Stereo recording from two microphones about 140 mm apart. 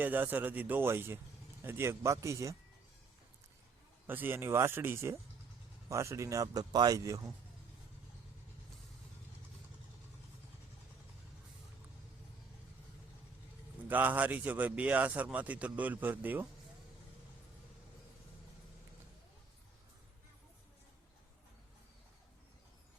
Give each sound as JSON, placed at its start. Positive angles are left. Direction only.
{"t": 0.0, "sound": "speech", "side_deg": -15}
{"t": 4.0, "sound": "speech", "side_deg": -15}
{"t": 13.8, "sound": "speech", "side_deg": -10}